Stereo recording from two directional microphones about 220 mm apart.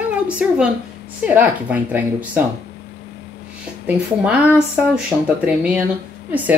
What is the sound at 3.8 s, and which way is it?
Speech, 5° right (ahead or behind).